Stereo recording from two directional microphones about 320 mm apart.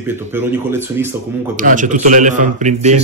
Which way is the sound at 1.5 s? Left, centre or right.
Right.